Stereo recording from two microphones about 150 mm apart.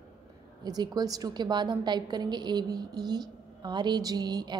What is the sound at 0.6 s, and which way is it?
A woman's voice, 25° right (ahead or behind).